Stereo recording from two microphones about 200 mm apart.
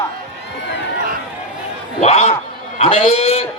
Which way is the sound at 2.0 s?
30° left (ahead or behind).